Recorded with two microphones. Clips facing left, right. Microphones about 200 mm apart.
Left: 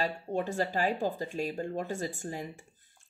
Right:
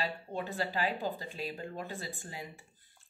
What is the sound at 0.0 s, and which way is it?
A woman's voice, 45° left (ahead or behind).